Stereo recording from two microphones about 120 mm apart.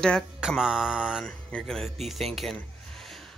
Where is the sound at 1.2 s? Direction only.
5° left (ahead or behind).